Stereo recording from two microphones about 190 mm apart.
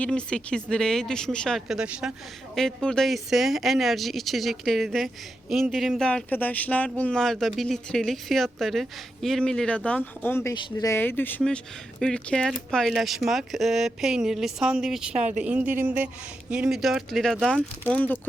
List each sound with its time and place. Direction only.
0.0 s speech: 5° left (ahead or behind)
15.2 s speech: 40° right (ahead or behind)
15.4 s speech: 10° right (ahead or behind); by 18.2 s 10° left (ahead or behind)